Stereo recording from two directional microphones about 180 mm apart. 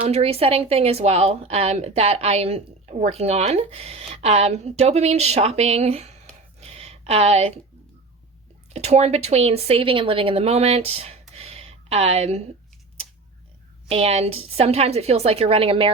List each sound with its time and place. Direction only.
0.0 s speech: 35° right (ahead or behind)
6.6 s a sound: 35° right (ahead or behind)
8.7 s a woman's voice: 35° right (ahead or behind)
13.9 s speech: 35° right (ahead or behind)